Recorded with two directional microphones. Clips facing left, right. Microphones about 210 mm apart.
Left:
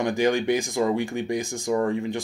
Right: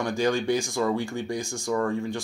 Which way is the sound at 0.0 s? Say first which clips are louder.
Left 3 dB; 20° left (ahead or behind).